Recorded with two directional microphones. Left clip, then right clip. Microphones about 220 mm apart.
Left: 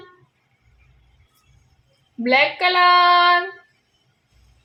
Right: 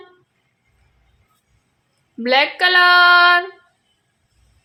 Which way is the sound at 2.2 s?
35° right (ahead or behind).